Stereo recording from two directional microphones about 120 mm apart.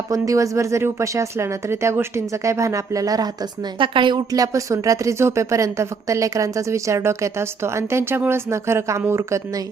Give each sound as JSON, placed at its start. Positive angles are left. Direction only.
{"t": 0.1, "sound": "speech", "side_deg": -25}
{"t": 3.8, "sound": "speech", "side_deg": -45}